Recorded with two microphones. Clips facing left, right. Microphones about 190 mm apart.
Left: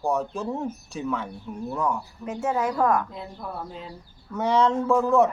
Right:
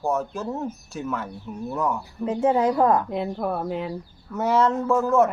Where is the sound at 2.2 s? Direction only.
30° right (ahead or behind).